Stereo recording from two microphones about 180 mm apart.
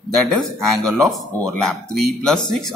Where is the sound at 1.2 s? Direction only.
Centre (ahead or behind).